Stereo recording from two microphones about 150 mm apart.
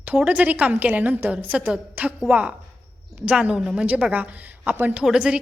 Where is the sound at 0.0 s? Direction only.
10° right (ahead or behind).